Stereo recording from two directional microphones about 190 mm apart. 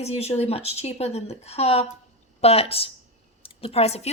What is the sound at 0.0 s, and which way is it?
Speech, 35° left (ahead or behind).